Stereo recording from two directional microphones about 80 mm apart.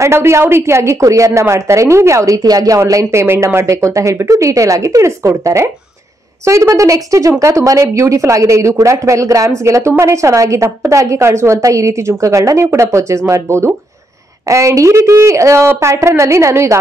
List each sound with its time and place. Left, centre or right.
0.0 s speech: right
2.8 s speech: right